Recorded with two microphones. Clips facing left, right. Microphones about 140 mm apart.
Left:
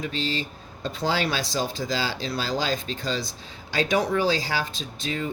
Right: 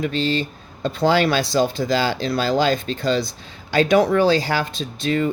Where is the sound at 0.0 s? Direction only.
60° right (ahead or behind).